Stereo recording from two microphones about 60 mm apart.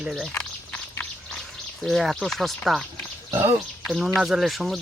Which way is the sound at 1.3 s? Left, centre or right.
Centre.